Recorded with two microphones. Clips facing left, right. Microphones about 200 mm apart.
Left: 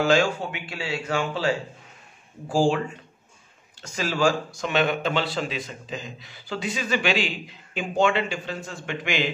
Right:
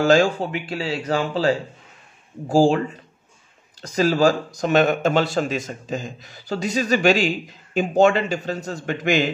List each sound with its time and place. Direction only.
0.0 s speech: 40° right (ahead or behind)